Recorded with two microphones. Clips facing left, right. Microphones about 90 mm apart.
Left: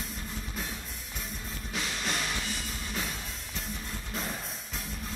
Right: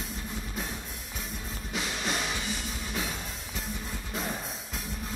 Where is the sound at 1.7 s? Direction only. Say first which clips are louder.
Right 2 dB; centre (ahead or behind).